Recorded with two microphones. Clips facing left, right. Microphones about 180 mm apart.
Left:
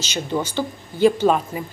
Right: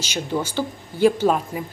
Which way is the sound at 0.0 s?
10° right (ahead or behind).